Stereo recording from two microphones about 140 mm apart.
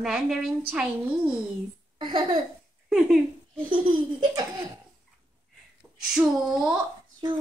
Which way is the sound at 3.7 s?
35° right (ahead or behind).